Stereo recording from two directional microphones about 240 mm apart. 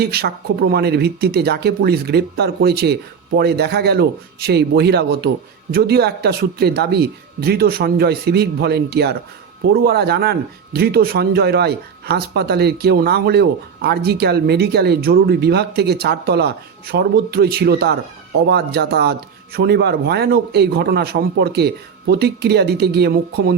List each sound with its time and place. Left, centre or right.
0.0 s speech: right